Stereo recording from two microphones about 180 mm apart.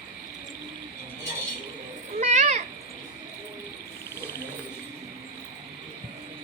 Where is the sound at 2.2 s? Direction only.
40° right (ahead or behind).